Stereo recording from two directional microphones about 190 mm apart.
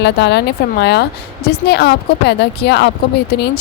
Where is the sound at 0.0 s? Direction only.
65° left (ahead or behind).